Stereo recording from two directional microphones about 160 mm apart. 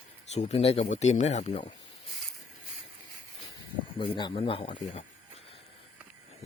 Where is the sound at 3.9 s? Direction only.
35° left (ahead or behind).